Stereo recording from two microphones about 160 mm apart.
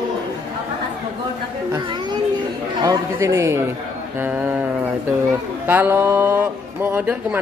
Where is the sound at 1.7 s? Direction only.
25° right (ahead or behind).